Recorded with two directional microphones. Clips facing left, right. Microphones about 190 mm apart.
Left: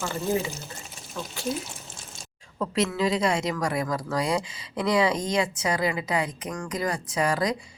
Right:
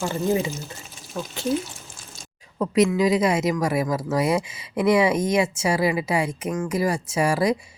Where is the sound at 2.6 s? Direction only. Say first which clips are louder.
Right 6 dB; 15° right (ahead or behind).